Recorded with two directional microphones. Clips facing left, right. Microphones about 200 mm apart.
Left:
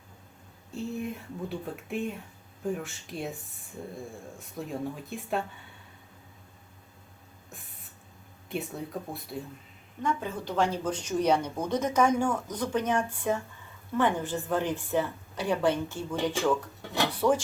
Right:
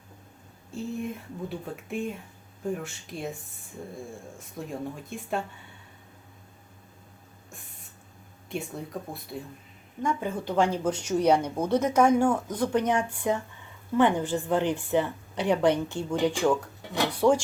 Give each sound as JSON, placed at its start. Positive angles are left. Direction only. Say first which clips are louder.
{"t": 0.7, "sound": "speech", "louder": "right 1 dB", "side_deg": 0}
{"t": 8.4, "sound": "speech", "louder": "even", "side_deg": 0}
{"t": 10.0, "sound": "speech", "louder": "right 2 dB", "side_deg": -10}